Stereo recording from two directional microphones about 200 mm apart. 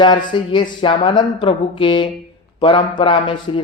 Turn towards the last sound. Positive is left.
turn(degrees=25)  # may be behind; listen again after turning